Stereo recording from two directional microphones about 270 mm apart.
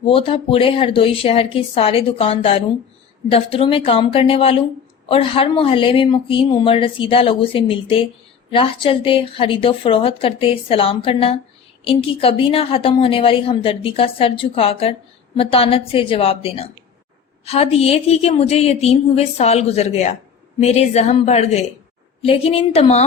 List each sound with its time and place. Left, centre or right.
0.0 s a woman's voice: centre